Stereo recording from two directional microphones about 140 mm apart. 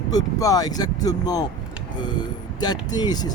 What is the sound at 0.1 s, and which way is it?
Speech, 25° left (ahead or behind).